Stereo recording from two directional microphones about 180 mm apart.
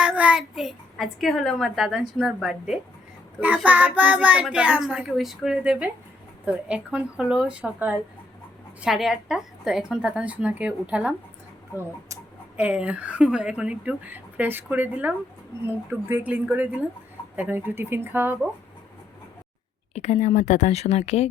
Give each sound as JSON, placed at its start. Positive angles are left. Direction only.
{"t": 0.0, "sound": "a child's voice", "side_deg": -5}
{"t": 19.9, "sound": "speech", "side_deg": 40}